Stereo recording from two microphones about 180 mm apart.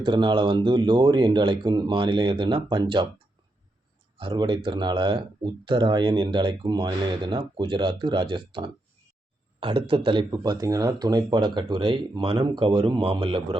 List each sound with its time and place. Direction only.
0.0 s speech: 25° right (ahead or behind)
4.2 s speech: 25° right (ahead or behind)